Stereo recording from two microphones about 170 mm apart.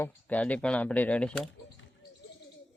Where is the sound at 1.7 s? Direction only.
90° left.